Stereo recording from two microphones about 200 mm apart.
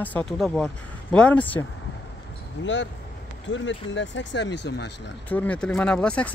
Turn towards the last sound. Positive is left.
turn(degrees=5)  # may be behind; listen again after turning